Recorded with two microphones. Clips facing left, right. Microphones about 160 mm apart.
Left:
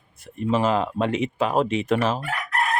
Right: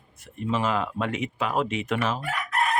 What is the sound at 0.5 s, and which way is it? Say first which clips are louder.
Speech: left 4 dB; 35° left (ahead or behind).